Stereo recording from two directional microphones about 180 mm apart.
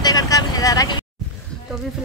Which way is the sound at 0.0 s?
20° left (ahead or behind).